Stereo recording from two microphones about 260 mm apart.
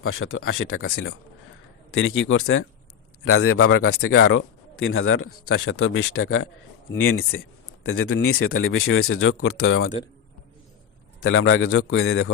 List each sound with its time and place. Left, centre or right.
0.0 s speech: left
2.0 s a man's voice: left
11.2 s speech: left